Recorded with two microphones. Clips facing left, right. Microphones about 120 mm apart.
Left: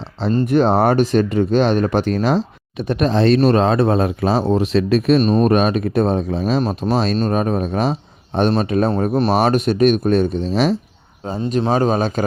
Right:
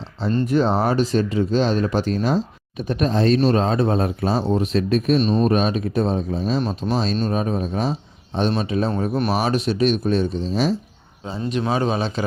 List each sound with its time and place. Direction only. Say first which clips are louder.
0.4 s speech: left 5 dB; 60° left (ahead or behind); by 4.4 s 90° left
4.4 s speech: left 4 dB; 80° left
5.2 s speech: left 4 dB; 50° left (ahead or behind); by 6.6 s 70° left (ahead or behind)
6.6 s a man's voice: left 4 dB; 45° left (ahead or behind)
6.9 s speech: left 4 dB; 65° left (ahead or behind)
11.6 s a man's voice: left 5 dB; 40° left (ahead or behind)